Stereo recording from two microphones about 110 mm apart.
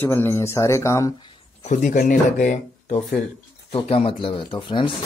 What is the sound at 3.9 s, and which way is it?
Speech, 60° left (ahead or behind).